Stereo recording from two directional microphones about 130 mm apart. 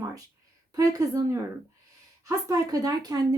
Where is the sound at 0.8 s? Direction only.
25° right (ahead or behind).